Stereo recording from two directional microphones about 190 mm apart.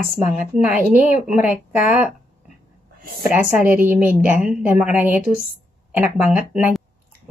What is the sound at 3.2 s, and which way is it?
A woman's voice, 10° right (ahead or behind).